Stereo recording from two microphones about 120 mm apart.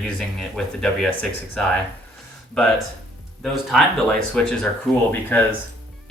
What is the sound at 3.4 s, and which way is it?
Speech, 5° left (ahead or behind).